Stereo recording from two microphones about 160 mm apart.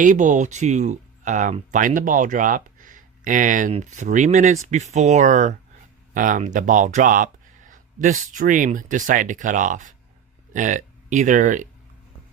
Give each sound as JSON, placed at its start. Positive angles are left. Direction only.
{"t": 0.0, "sound": "speech", "side_deg": -55}